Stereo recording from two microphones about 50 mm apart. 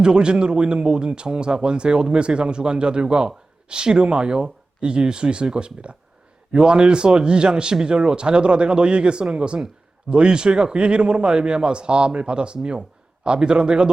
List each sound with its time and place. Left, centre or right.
0.0 s speech: centre